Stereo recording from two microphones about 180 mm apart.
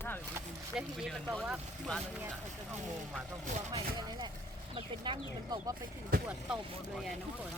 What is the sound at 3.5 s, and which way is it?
Speech, 40° right (ahead or behind).